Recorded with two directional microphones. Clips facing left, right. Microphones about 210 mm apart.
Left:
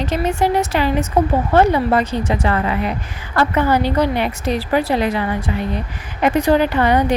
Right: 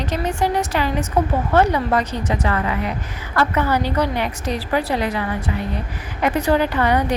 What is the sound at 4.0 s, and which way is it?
A woman's voice, 15° left (ahead or behind).